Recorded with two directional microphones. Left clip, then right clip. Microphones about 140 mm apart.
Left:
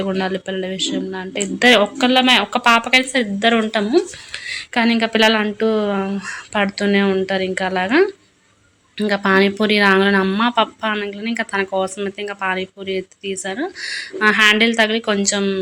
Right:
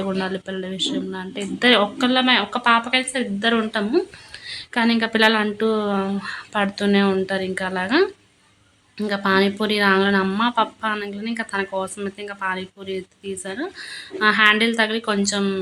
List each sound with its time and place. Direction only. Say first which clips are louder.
0.0 s a woman's voice: left 4 dB; 20° left (ahead or behind)
9.0 s speech: left 4 dB; 30° left (ahead or behind)